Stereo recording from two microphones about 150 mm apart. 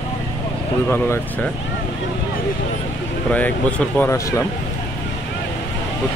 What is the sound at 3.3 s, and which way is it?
Speech, 10° left (ahead or behind).